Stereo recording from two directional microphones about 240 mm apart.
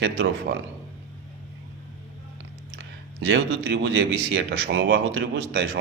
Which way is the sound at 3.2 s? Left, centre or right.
Right.